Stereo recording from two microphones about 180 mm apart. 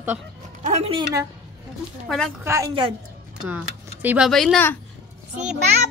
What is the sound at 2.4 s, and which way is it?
Speech, 15° right (ahead or behind).